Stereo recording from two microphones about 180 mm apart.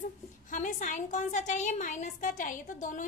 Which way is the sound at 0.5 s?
45° left (ahead or behind).